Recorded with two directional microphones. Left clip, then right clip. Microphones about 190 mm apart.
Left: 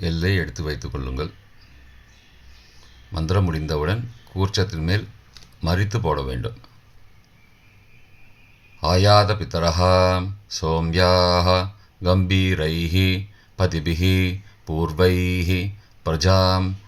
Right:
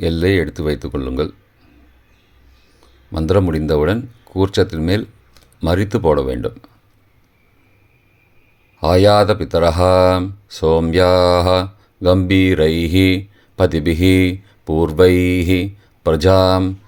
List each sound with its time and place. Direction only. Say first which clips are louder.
0.0 s speech: right 9 dB; 45° right (ahead or behind)
3.1 s speech: right 10 dB; 45° right (ahead or behind)
8.8 s speech: right 5 dB; 45° right (ahead or behind)